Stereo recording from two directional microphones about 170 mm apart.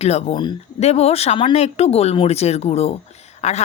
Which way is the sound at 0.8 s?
40° left (ahead or behind).